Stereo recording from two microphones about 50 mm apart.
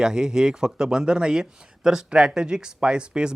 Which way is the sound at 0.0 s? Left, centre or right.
Centre.